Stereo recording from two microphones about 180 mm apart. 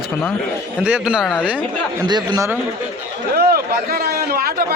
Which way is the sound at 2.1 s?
25° right (ahead or behind).